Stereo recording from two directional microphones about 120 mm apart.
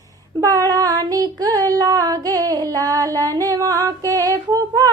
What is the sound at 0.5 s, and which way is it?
Female singing, 30° right (ahead or behind).